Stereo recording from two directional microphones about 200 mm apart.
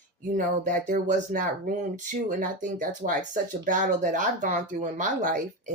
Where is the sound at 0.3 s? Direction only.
40° right (ahead or behind).